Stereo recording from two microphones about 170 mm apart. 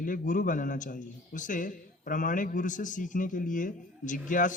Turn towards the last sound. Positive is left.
turn(degrees=50)  # may be behind; listen again after turning